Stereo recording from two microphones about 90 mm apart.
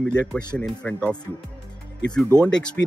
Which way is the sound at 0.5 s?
10° left (ahead or behind).